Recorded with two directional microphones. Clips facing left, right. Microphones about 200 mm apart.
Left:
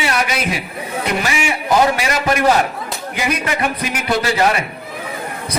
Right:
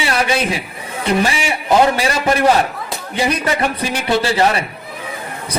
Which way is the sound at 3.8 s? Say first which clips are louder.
Right 2 dB; 30° right (ahead or behind).